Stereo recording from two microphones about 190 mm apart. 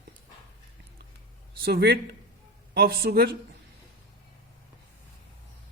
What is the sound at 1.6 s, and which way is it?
Speech, 55° right (ahead or behind).